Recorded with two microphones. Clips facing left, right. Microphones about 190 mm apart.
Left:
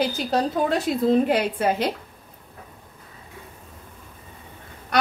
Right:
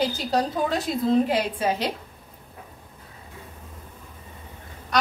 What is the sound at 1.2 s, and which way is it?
Speech, 60° left (ahead or behind).